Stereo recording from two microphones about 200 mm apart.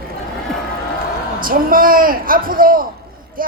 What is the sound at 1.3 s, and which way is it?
A man's voice, 45° right (ahead or behind).